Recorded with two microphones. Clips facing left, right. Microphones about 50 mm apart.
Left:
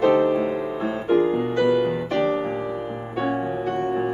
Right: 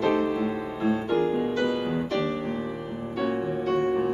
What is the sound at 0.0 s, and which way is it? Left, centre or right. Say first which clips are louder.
Music: left 6 dB; left.